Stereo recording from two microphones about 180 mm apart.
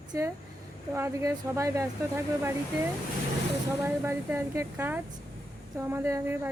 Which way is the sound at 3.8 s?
15° right (ahead or behind).